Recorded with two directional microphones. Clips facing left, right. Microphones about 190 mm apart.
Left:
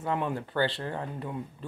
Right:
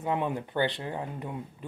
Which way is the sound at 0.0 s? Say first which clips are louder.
Right 1 dB; 20° right (ahead or behind).